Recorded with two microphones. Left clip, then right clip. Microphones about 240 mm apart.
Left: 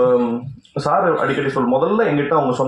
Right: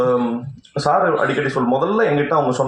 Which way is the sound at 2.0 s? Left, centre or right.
Right.